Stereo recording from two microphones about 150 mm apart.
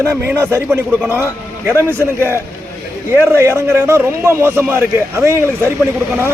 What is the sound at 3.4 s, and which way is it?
A man's voice, 15° right (ahead or behind).